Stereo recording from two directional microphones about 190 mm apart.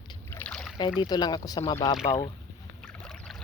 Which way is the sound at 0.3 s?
10° left (ahead or behind).